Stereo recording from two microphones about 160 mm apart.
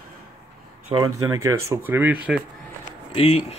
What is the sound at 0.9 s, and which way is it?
Speech, 25° right (ahead or behind).